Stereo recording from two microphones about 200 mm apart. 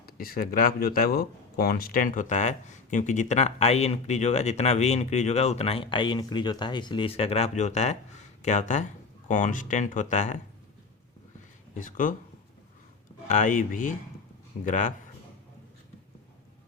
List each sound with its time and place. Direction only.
0.0 s speech: 45° left (ahead or behind)
11.7 s speech: 40° left (ahead or behind)
13.2 s speech: 40° left (ahead or behind)